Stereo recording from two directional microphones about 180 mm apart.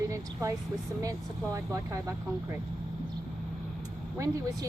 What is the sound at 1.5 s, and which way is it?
Speech, 15° right (ahead or behind).